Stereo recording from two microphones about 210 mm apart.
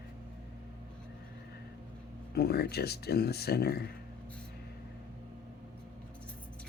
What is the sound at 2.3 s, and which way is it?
Speech, 50° left (ahead or behind).